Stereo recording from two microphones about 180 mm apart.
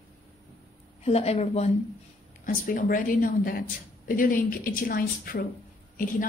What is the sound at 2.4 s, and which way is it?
A woman's voice, 45° left (ahead or behind).